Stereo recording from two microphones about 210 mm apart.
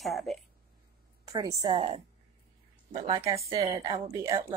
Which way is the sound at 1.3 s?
15° right (ahead or behind).